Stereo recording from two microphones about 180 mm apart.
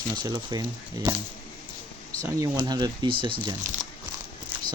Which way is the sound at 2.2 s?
20° right (ahead or behind).